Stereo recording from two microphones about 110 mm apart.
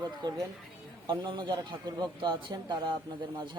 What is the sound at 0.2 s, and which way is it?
A man's voice, 40° right (ahead or behind).